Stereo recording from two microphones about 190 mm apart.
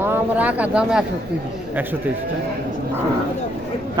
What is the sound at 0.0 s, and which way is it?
Speech, 10° right (ahead or behind).